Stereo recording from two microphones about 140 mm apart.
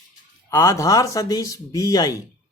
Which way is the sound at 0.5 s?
20° left (ahead or behind).